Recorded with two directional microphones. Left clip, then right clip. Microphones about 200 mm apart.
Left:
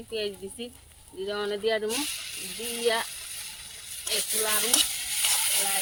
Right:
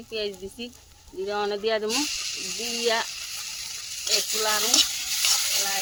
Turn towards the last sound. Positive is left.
turn(degrees=0)  # may be behind; listen again after turning